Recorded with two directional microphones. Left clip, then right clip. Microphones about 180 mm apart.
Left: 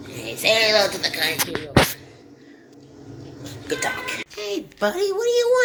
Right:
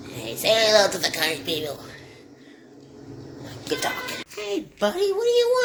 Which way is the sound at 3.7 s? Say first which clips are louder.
Left 3 dB; centre (ahead or behind).